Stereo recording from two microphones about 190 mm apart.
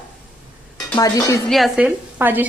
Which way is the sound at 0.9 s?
15° left (ahead or behind).